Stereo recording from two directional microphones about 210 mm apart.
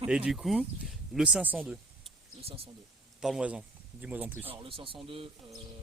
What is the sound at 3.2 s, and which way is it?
Speech, 5° right (ahead or behind).